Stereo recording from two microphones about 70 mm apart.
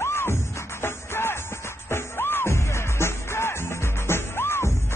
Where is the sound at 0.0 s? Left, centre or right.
Left.